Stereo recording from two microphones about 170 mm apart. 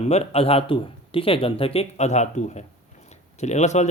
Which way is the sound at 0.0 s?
40° left (ahead or behind).